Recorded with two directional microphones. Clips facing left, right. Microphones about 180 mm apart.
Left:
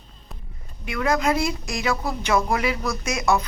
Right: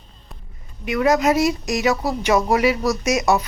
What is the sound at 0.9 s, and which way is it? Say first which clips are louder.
A woman's voice: right 5 dB; 20° right (ahead or behind).